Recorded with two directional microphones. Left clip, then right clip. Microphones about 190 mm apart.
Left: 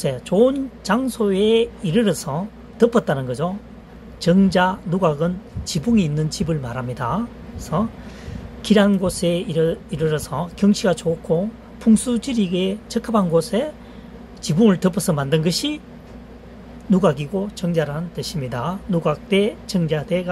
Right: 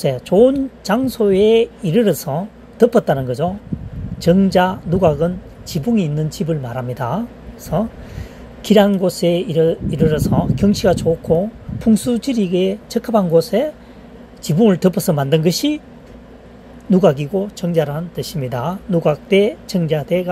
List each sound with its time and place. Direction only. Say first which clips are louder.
0.0 s speech: right 5 dB; 15° right (ahead or behind)
16.9 s speech: right 5 dB; 15° right (ahead or behind)